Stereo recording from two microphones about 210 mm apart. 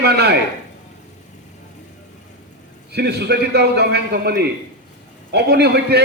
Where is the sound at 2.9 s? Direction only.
50° right (ahead or behind).